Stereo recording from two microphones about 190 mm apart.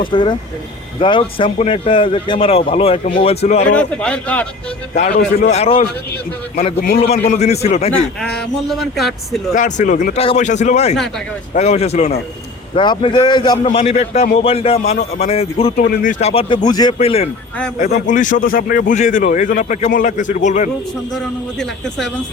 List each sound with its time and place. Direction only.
0.1 s speech: 25° left (ahead or behind)
3.8 s a man's voice: 5° left (ahead or behind)
5.5 s speech: 30° left (ahead or behind)
6.8 s a man's voice: 55° left (ahead or behind)
7.3 s speech: 35° left (ahead or behind)
7.9 s speech: centre (ahead or behind)
9.6 s speech: 40° left (ahead or behind); by 13.6 s 20° left (ahead or behind)
13.7 s speech: 35° left (ahead or behind)
15.7 s speech: 40° left (ahead or behind); by 16.9 s 20° left (ahead or behind)
17.0 s speech: 30° left (ahead or behind)
17.7 s speech: 50° left (ahead or behind)
21.6 s speech: centre (ahead or behind)